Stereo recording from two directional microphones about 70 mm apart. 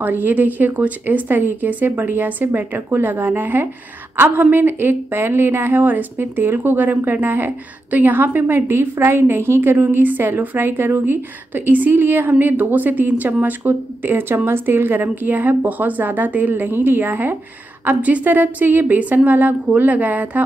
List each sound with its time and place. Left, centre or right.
0.0 s a woman's voice: right